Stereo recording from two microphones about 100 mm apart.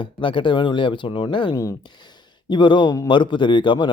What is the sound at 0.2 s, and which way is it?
A man's voice, 55° left (ahead or behind).